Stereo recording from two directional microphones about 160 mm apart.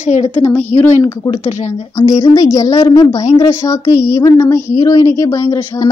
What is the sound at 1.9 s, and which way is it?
Speech, 20° left (ahead or behind).